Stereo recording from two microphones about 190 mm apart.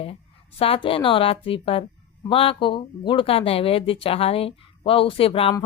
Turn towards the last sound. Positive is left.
turn(degrees=30)  # may be behind; listen again after turning